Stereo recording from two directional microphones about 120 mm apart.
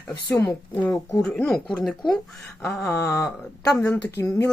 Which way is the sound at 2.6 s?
20° left (ahead or behind).